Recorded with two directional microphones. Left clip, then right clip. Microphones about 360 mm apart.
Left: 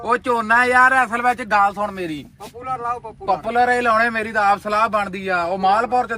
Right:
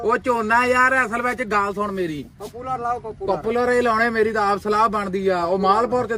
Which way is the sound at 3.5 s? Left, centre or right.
Left.